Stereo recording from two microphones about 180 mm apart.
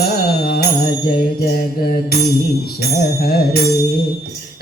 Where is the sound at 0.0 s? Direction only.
60° left (ahead or behind).